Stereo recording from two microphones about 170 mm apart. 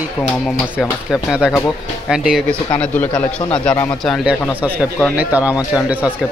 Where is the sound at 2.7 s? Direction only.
10° left (ahead or behind).